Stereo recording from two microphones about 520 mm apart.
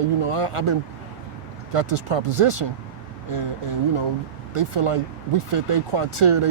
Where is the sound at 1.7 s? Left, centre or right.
Right.